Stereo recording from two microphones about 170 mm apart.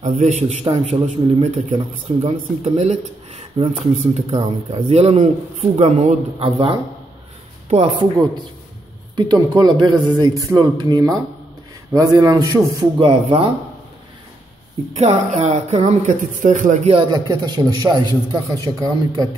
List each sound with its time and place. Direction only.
0.0 s speech: 45° right (ahead or behind)
7.7 s speech: 35° right (ahead or behind)
9.1 s a man's voice: 25° right (ahead or behind)
13.0 s speech: 35° right (ahead or behind)
15.0 s speech: 40° right (ahead or behind)
16.9 s a man's voice: 25° right (ahead or behind)